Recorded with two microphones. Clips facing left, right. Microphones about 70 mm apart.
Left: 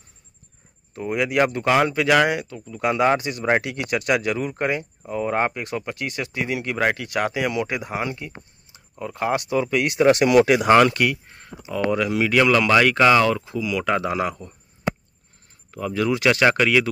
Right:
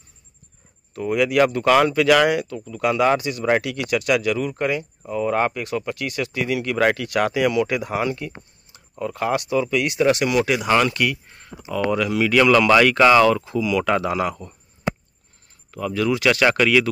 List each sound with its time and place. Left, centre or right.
0.9 s speech: left
2.8 s speech: left
11.7 s speech: left
15.7 s speech: left